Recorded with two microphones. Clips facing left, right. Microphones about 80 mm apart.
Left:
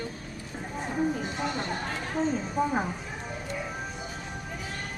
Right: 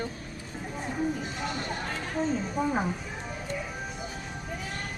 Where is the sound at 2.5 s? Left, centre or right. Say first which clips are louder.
Left 2 dB; centre.